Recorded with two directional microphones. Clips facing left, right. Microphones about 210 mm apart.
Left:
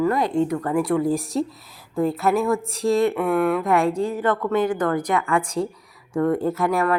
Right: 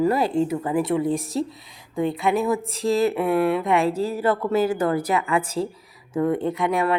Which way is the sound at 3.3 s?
30° right (ahead or behind).